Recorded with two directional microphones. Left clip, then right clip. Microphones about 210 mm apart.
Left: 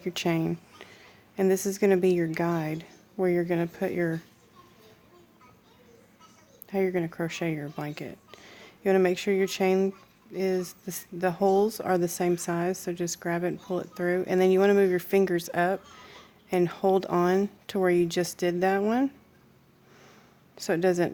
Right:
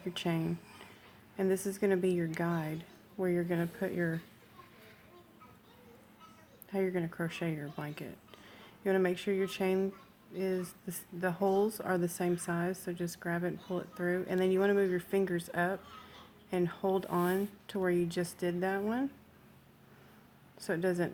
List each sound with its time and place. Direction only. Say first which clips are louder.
0.0 s speech: left 8 dB; 40° left (ahead or behind)
6.7 s speech: left 7 dB; 35° left (ahead or behind)
20.6 s speech: left 8 dB; 40° left (ahead or behind)